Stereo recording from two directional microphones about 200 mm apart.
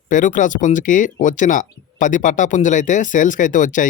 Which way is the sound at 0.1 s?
40° left (ahead or behind).